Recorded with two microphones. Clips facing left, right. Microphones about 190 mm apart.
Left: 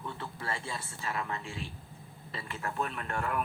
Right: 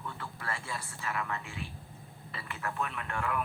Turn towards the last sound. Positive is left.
turn(degrees=40)  # may be behind; listen again after turning